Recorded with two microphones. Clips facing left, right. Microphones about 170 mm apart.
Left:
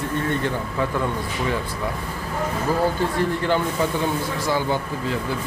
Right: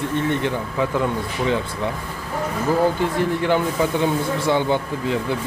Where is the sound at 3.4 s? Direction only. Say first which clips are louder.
Right 2 dB; 15° right (ahead or behind).